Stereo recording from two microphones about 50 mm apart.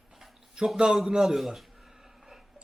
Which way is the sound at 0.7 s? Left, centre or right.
Centre.